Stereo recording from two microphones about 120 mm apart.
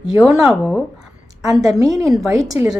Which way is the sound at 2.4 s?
30° right (ahead or behind).